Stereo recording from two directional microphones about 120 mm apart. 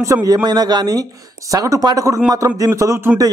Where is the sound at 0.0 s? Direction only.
30° right (ahead or behind).